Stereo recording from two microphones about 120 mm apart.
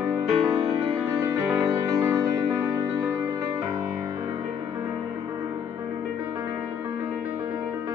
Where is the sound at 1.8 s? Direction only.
25° right (ahead or behind).